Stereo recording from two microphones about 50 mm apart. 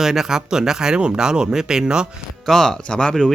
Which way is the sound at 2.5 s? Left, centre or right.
Centre.